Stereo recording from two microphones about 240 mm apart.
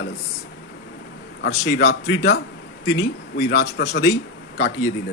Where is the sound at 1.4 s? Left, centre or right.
Left.